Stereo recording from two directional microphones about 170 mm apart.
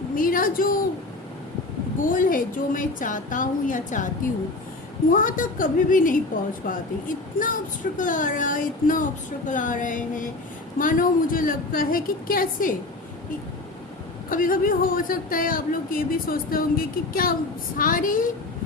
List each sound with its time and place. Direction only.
0.2 s a woman's voice: 55° left (ahead or behind)
2.1 s a woman's voice: 55° left (ahead or behind)
5.1 s a woman's voice: 50° left (ahead or behind)
14.3 s a woman's voice: 55° left (ahead or behind)